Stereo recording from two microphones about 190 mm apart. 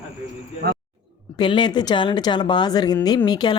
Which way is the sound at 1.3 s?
25° left (ahead or behind).